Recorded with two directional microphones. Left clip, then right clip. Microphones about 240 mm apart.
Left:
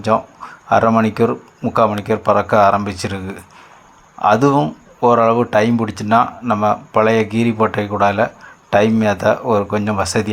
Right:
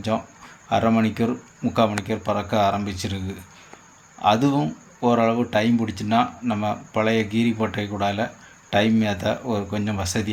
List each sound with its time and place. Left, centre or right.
0.7 s speech: centre
4.2 s speech: centre